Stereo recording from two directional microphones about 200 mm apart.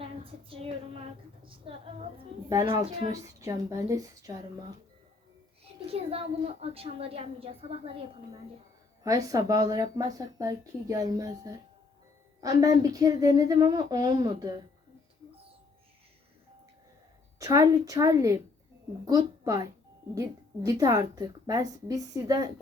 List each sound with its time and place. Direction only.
0.0 s a sound: 25° right (ahead or behind)
1.5 s a woman's voice: 25° right (ahead or behind)
3.1 s speech: 15° right (ahead or behind)
5.9 s a woman's voice: 30° right (ahead or behind)
9.0 s a woman's voice: 15° right (ahead or behind)
17.4 s a woman's voice: 15° right (ahead or behind)